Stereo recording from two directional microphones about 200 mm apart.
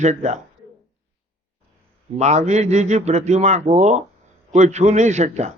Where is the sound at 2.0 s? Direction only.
35° right (ahead or behind).